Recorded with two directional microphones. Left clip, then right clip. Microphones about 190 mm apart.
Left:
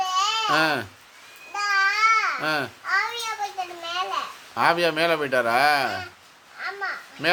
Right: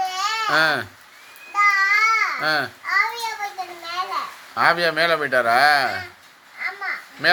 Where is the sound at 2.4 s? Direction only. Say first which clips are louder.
Right 4 dB; 20° left (ahead or behind).